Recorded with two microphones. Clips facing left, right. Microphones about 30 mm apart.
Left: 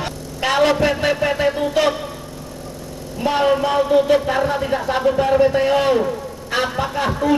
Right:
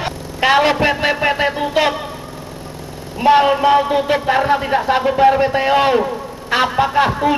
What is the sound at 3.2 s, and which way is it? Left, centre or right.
A man's voice, right.